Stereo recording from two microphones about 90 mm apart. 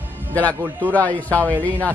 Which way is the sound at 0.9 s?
15° left (ahead or behind).